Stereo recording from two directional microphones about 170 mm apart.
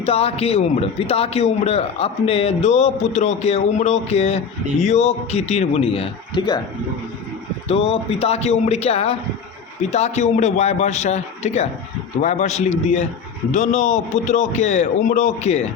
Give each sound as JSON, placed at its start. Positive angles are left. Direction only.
{"t": 0.0, "sound": "a man's voice", "side_deg": 35}
{"t": 7.7, "sound": "a man's voice", "side_deg": 35}